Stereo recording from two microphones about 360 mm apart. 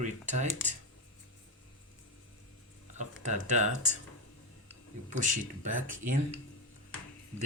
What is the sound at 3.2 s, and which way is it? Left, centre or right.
Speech, centre.